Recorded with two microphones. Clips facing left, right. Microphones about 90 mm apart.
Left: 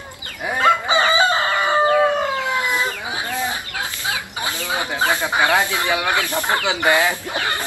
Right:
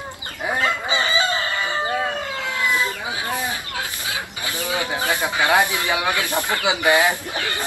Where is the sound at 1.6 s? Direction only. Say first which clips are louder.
Left 11 dB; 65° left (ahead or behind).